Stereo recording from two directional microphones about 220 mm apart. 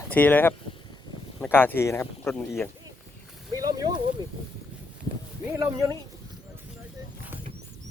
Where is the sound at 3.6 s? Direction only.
15° right (ahead or behind).